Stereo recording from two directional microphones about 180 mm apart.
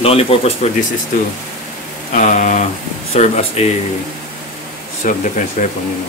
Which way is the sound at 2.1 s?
45° left (ahead or behind).